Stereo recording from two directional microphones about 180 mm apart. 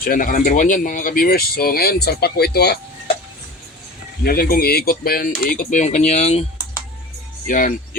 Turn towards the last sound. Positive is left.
turn(degrees=50)  # may be behind; listen again after turning